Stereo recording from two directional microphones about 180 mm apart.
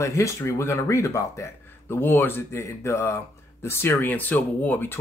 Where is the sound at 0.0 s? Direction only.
15° left (ahead or behind).